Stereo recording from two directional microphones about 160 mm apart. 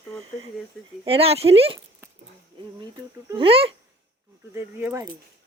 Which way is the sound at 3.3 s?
35° right (ahead or behind).